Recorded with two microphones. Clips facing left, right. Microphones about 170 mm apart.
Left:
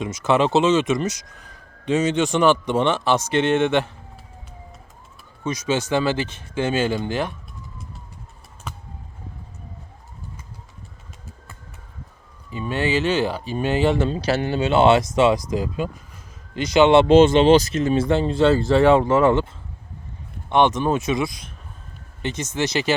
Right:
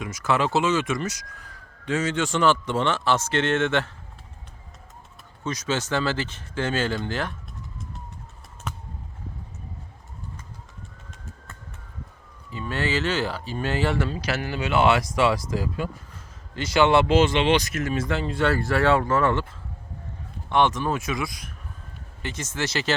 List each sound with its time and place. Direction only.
0.0 s speech: 25° left (ahead or behind)
5.4 s speech: 10° left (ahead or behind)
12.5 s speech: 15° left (ahead or behind)
17.3 s speech: 40° left (ahead or behind)
20.5 s speech: 20° left (ahead or behind)